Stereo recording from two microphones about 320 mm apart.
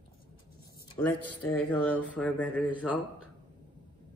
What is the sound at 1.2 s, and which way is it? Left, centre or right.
Speech, left.